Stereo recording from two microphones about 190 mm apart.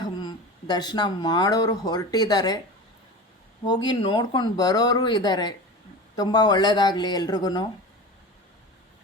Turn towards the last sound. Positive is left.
turn(degrees=20)  # may be behind; listen again after turning